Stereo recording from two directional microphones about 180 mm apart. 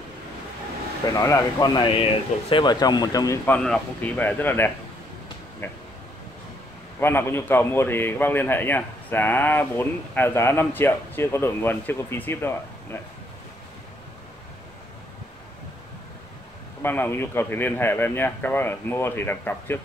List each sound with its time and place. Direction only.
1.1 s a man's voice: 20° left (ahead or behind)
7.0 s a man's voice: 10° left (ahead or behind)
16.8 s a man's voice: 10° left (ahead or behind)